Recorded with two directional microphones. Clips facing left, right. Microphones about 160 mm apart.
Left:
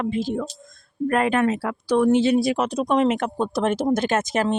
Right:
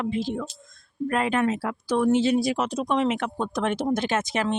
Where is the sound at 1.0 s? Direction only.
55° left (ahead or behind).